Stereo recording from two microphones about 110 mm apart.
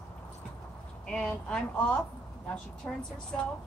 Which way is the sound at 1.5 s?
10° left (ahead or behind).